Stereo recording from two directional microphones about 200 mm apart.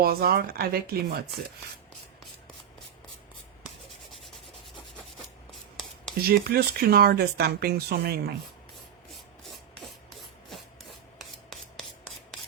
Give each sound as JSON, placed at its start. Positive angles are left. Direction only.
{"t": 0.0, "sound": "speech", "side_deg": -50}
{"t": 6.2, "sound": "speech", "side_deg": -50}
{"t": 9.0, "sound": "rub", "side_deg": 0}